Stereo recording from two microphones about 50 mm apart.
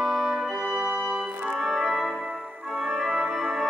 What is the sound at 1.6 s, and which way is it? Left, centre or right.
Music, centre.